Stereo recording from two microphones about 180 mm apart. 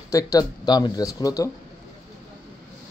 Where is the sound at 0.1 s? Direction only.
20° left (ahead or behind).